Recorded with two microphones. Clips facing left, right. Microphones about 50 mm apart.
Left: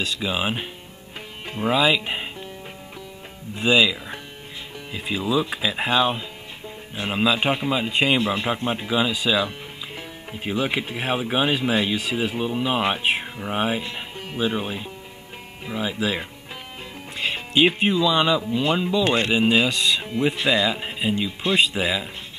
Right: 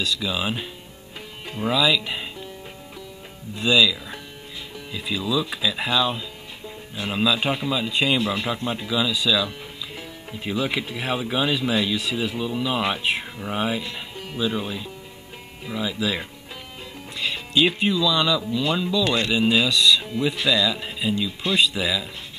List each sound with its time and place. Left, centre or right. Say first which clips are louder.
0.0 s speech: left 1 dB; left
1.7 s speech: left 1 dB; left
3.5 s speech: left 1 dB; left
8.2 s speech: left 1 dB; centre
8.5 s speech: left 2 dB; left
17.2 s speech: left 2 dB; left